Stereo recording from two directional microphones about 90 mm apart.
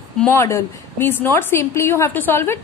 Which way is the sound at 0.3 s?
30° left (ahead or behind).